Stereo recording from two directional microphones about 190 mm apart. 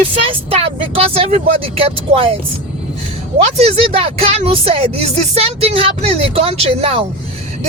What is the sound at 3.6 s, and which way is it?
Speech, 30° right (ahead or behind).